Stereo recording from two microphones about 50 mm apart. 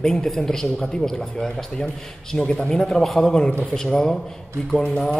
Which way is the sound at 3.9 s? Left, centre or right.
Centre.